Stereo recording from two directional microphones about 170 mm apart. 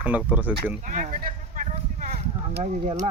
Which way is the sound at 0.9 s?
45° right (ahead or behind).